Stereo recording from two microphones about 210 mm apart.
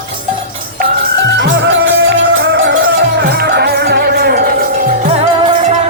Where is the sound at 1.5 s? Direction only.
45° right (ahead or behind); by 5.5 s 30° right (ahead or behind).